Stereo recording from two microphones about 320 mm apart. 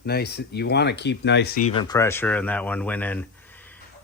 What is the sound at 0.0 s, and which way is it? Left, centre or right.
A man's voice, left.